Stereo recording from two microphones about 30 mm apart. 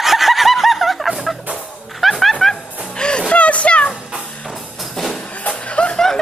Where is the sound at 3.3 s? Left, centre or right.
Left.